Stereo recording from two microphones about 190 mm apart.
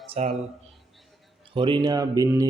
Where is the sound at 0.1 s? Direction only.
30° right (ahead or behind).